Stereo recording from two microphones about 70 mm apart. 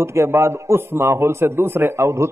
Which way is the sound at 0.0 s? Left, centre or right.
Right.